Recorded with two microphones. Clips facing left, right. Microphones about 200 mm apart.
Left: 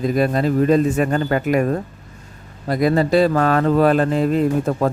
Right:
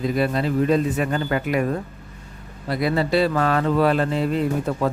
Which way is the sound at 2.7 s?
45° left (ahead or behind).